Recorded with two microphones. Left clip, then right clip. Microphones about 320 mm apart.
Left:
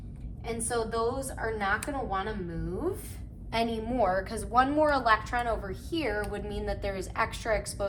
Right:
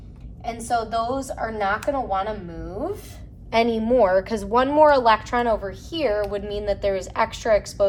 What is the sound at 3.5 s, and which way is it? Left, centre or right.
A woman's voice, centre.